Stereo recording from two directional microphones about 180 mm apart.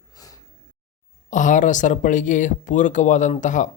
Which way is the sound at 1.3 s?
45° left (ahead or behind).